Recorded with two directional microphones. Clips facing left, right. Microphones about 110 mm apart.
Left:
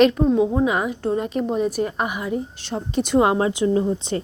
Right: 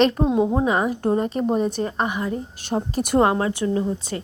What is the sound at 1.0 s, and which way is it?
Speech, 45° right (ahead or behind).